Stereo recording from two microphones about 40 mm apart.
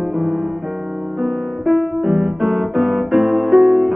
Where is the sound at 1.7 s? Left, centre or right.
Centre.